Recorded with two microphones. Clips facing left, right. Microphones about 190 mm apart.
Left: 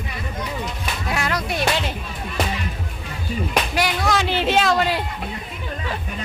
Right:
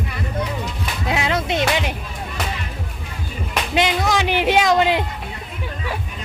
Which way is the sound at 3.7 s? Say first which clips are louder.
Right 5 dB; 20° right (ahead or behind).